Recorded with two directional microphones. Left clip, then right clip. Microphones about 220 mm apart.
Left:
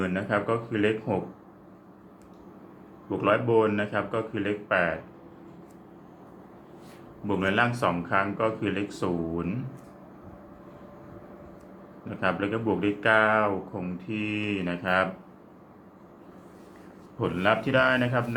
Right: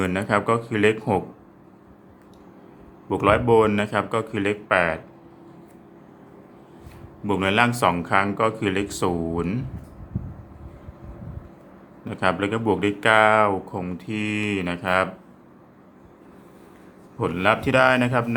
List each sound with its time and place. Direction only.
0.0 s speech: 35° right (ahead or behind)
3.1 s speech: 35° right (ahead or behind)
7.3 s speech: 30° right (ahead or behind)
12.0 s speech: 30° right (ahead or behind)
17.2 s a man's voice: 25° right (ahead or behind)